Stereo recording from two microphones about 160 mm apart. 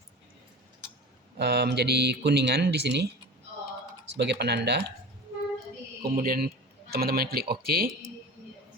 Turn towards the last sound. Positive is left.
turn(degrees=-75)  # may be behind; listen again after turning